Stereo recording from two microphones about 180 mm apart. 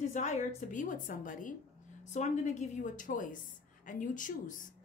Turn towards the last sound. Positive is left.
turn(degrees=45)  # may be behind; listen again after turning